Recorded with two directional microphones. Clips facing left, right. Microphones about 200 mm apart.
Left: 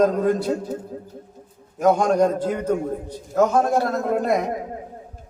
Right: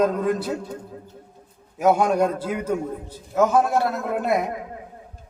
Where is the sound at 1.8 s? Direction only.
5° right (ahead or behind).